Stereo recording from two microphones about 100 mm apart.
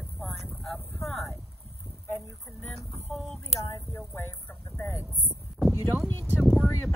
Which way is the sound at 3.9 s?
25° left (ahead or behind).